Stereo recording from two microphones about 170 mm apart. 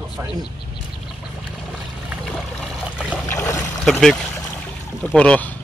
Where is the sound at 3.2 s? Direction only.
15° left (ahead or behind).